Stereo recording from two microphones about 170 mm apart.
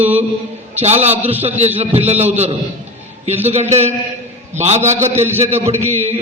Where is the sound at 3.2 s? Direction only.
40° right (ahead or behind).